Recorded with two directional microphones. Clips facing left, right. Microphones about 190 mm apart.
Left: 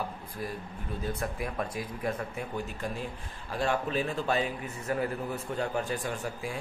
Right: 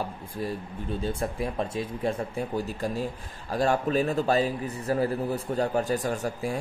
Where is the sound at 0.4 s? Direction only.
30° right (ahead or behind).